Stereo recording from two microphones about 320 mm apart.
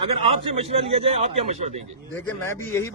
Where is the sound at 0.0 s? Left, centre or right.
Centre.